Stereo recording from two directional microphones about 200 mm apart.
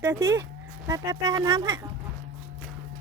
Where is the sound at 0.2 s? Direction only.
20° right (ahead or behind).